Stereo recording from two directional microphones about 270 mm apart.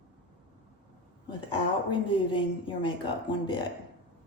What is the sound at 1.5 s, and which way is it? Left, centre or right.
A woman's voice, centre.